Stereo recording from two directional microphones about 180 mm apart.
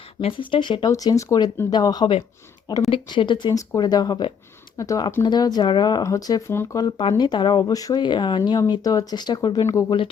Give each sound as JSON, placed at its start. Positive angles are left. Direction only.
{"t": 0.2, "sound": "speech", "side_deg": 30}